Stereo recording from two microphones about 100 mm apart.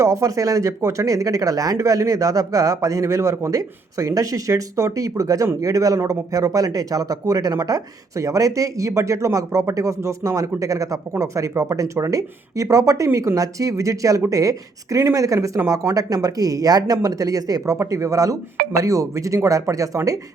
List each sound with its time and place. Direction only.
0.0 s speech: 30° right (ahead or behind)